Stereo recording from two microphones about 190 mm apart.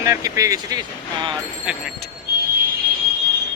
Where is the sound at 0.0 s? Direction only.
15° right (ahead or behind).